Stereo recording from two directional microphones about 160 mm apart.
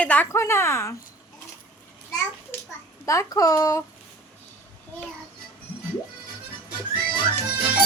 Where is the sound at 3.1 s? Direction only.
20° left (ahead or behind).